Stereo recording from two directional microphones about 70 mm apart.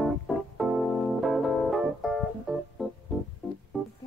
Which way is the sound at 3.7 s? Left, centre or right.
Centre.